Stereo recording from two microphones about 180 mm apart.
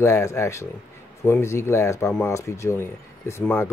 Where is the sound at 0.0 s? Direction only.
15° left (ahead or behind).